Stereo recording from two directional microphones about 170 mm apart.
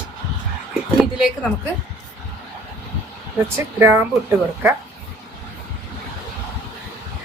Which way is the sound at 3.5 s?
10° right (ahead or behind).